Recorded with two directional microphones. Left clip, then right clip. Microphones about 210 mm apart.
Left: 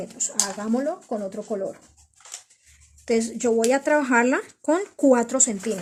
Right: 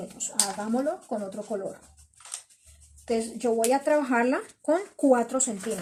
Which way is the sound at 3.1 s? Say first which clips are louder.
Left 4 dB; 40° left (ahead or behind).